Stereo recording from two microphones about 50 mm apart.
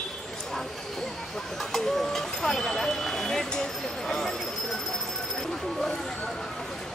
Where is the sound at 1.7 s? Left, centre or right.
Centre.